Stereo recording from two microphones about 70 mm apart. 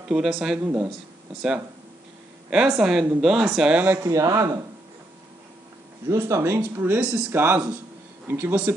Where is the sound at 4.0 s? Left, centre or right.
Right.